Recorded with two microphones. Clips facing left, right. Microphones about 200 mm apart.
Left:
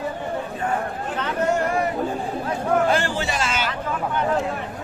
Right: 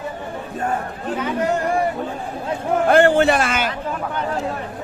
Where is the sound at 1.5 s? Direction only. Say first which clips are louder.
Right 1 dB; 30° right (ahead or behind).